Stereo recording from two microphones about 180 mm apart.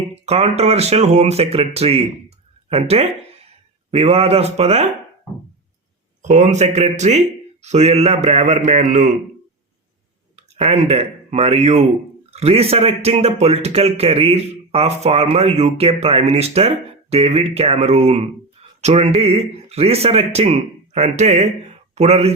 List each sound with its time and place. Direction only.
0.3 s a man's voice: 35° right (ahead or behind)
6.2 s a man's voice: 40° right (ahead or behind)
10.3 s a man's voice: 35° right (ahead or behind)